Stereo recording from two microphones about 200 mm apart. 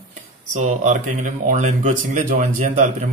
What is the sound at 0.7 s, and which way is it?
Speech, 35° right (ahead or behind).